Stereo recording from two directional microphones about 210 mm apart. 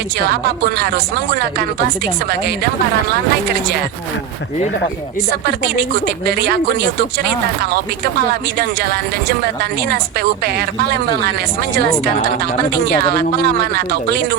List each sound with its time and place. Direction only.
0.3 s a woman's voice: 50° right (ahead or behind)
6.2 s a woman's voice: 50° right (ahead or behind)
13.1 s a woman's voice: 50° right (ahead or behind)